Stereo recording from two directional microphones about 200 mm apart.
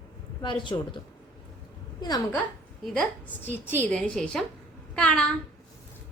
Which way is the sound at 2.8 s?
5° left (ahead or behind).